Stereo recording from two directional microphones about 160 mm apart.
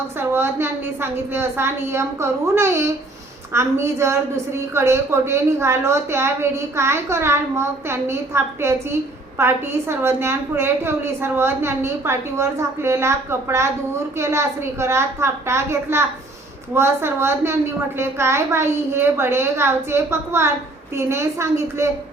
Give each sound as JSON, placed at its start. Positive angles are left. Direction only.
{"t": 0.2, "sound": "a woman's voice", "side_deg": -15}